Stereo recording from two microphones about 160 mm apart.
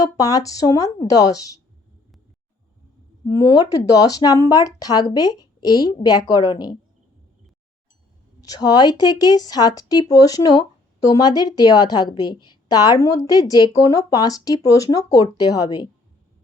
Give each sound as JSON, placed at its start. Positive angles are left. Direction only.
{"t": 0.0, "sound": "speech", "side_deg": 20}
{"t": 3.2, "sound": "speech", "side_deg": 20}
{"t": 8.4, "sound": "speech", "side_deg": 25}